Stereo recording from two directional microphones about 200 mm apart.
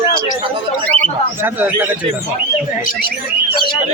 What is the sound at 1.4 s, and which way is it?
Speech, 10° right (ahead or behind).